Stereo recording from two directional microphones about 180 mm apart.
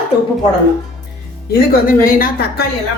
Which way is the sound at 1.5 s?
50° left (ahead or behind).